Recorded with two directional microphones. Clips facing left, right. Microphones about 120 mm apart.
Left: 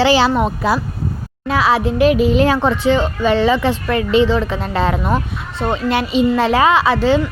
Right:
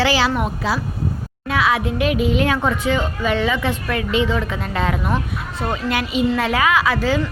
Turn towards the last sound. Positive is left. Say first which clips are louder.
# left 5 dB
turn(degrees=25)  # may be behind; listen again after turning